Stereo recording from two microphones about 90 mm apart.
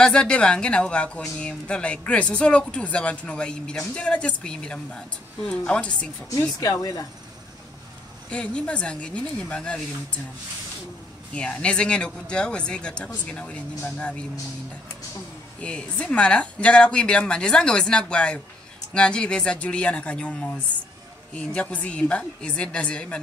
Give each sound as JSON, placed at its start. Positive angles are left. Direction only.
{"t": 0.0, "sound": "speech", "side_deg": 10}
{"t": 6.6, "sound": "speech", "side_deg": 40}
{"t": 8.3, "sound": "speech", "side_deg": 10}
{"t": 11.3, "sound": "speech", "side_deg": 10}
{"t": 15.6, "sound": "speech", "side_deg": 10}